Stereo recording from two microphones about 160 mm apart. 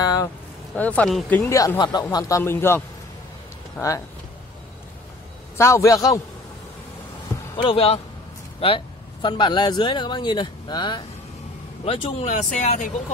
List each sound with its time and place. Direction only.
0.0 s a sound: 25° left (ahead or behind)
0.7 s speech: 10° left (ahead or behind)
1.4 s speech: 15° left (ahead or behind)
5.6 s speech: 20° left (ahead or behind)
7.5 s speech: 35° left (ahead or behind)
11.8 s speech: 40° left (ahead or behind)